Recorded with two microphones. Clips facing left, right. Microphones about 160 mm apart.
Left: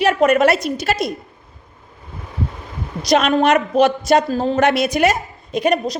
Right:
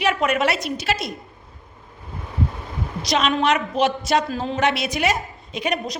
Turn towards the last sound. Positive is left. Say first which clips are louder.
# left 7 dB
turn(degrees=40)  # may be behind; listen again after turning